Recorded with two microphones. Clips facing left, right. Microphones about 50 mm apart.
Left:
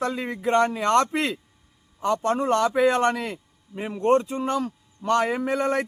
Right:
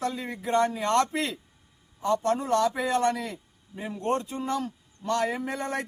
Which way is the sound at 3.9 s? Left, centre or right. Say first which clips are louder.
Left 8 dB; left.